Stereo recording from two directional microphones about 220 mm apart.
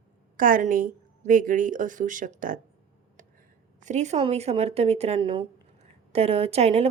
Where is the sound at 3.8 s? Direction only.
35° right (ahead or behind).